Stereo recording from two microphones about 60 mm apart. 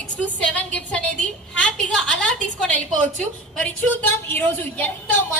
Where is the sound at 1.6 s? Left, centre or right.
Centre.